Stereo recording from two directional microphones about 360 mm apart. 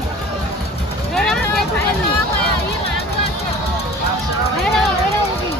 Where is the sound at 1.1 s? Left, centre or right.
Centre.